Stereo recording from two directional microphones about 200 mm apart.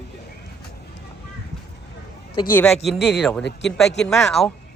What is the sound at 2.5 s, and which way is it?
Speech, 10° left (ahead or behind).